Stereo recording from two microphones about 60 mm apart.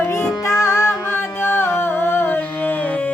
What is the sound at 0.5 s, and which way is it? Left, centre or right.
Music, left.